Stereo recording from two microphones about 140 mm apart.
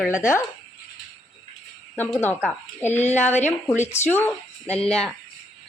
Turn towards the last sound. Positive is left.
turn(degrees=5)  # may be behind; listen again after turning